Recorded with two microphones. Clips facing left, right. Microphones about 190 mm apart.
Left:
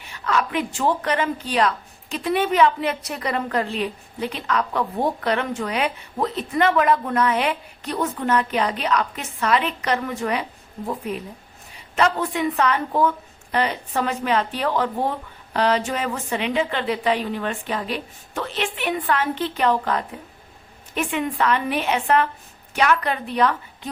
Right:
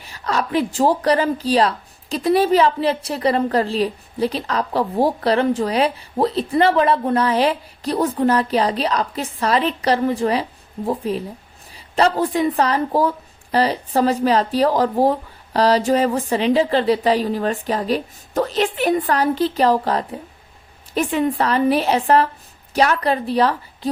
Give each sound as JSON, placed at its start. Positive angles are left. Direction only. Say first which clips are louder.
{"t": 0.0, "sound": "a woman's voice", "louder": "right 1 dB", "side_deg": -35}